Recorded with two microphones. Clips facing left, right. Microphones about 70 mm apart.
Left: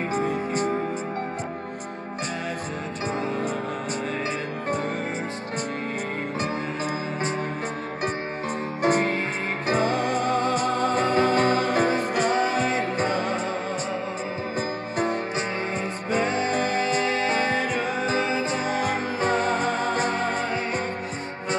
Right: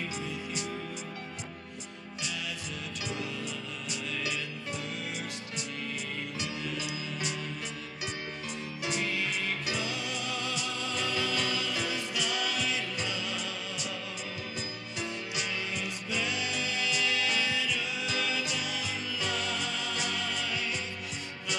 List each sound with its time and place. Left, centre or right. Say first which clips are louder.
0.1 s music: left 12 dB; left
8.8 s music: left 11 dB; left
15.0 s music: left 11 dB; left